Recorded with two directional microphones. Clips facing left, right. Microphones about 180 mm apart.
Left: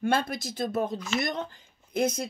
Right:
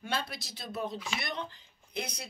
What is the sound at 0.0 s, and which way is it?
Speech, 50° left (ahead or behind).